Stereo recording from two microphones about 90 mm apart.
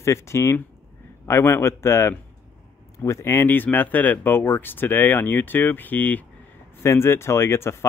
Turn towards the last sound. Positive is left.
turn(degrees=30)  # may be behind; listen again after turning